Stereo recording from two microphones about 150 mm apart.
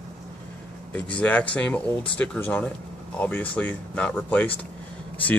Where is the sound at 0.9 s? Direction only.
10° left (ahead or behind).